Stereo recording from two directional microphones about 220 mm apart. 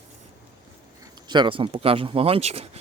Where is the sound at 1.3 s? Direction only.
20° right (ahead or behind).